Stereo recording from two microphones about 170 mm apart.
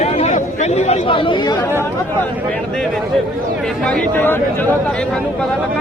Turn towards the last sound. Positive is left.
turn(degrees=10)  # may be behind; listen again after turning